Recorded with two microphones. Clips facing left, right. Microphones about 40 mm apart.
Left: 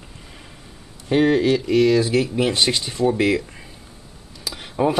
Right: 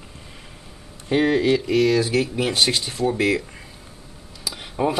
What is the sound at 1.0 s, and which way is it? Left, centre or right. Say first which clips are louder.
Speech: left 2 dB; centre.